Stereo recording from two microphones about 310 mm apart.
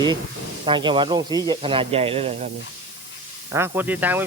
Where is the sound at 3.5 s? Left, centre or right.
Centre.